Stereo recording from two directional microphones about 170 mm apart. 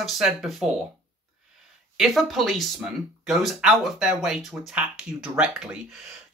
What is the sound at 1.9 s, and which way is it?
A woman's voice, centre (ahead or behind).